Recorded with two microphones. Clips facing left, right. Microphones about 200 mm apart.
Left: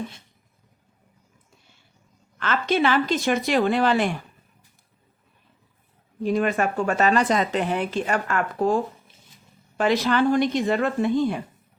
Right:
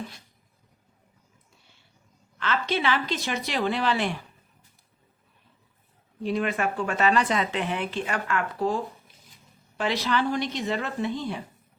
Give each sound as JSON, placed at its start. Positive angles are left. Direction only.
{"t": 2.4, "sound": "speech", "side_deg": 50}
{"t": 6.2, "sound": "speech", "side_deg": 45}